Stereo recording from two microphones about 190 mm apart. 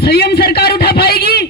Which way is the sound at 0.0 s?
55° left (ahead or behind).